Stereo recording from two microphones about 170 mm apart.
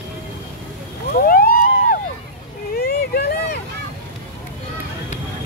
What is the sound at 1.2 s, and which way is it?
Vehicle, 60° left (ahead or behind).